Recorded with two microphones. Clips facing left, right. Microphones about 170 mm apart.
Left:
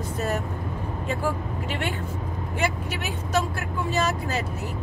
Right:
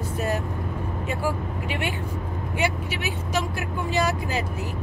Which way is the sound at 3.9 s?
15° right (ahead or behind).